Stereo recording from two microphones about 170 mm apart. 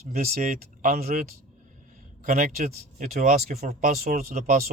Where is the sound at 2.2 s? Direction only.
55° right (ahead or behind).